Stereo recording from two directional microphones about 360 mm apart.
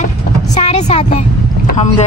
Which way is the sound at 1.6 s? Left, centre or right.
Centre.